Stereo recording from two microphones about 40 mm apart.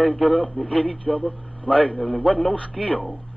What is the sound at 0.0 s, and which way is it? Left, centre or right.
A man's voice, left.